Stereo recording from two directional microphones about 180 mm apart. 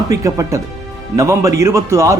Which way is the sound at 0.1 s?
15° right (ahead or behind).